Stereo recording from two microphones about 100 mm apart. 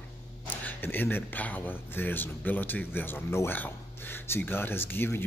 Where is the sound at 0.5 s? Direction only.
20° left (ahead or behind).